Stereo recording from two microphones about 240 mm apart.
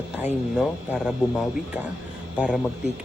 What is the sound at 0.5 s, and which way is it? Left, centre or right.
Speech, centre.